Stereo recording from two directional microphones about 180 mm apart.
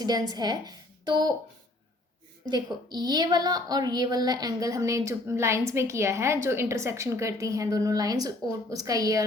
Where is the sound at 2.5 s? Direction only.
20° right (ahead or behind).